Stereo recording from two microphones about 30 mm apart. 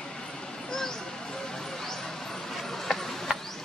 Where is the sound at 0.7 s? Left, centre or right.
Centre.